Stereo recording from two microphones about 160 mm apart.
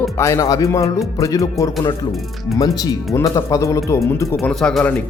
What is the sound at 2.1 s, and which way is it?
Speech, centre (ahead or behind).